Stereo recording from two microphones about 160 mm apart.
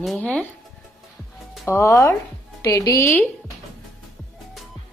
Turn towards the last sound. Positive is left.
turn(degrees=20)  # may be behind; listen again after turning